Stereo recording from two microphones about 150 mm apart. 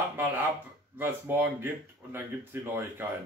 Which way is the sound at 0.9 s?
15° right (ahead or behind).